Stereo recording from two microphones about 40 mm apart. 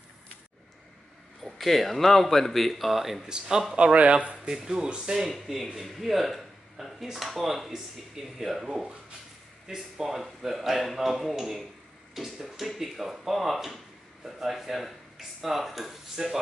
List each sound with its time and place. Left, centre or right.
1.4 s speech: centre
3.3 s speech: centre
3.7 s speech: right
4.6 s speech: centre
5.8 s speech: centre